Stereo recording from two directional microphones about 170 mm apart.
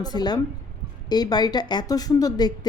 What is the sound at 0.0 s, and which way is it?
A woman's voice, 25° left (ahead or behind).